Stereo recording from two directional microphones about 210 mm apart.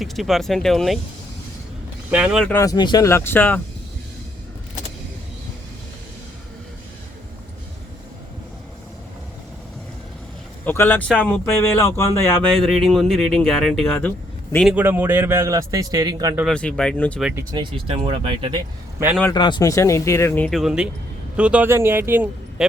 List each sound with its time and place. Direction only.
0.0 s speech: centre (ahead or behind)
2.0 s speech: 5° right (ahead or behind)
2.5 s speech: 15° left (ahead or behind)
10.7 s speech: 10° left (ahead or behind)
12.6 s a man's voice: centre (ahead or behind); by 16.3 s 20° right (ahead or behind)
16.3 s speech: centre (ahead or behind)
17.3 s speech: 20° right (ahead or behind)
19.3 s a man's voice: 20° left (ahead or behind); by 22.6 s 10° right (ahead or behind)